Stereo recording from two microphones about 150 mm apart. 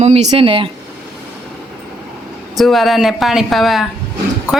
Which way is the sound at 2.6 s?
Centre (ahead or behind).